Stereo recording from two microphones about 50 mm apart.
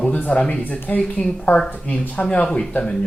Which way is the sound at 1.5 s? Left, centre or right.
Left.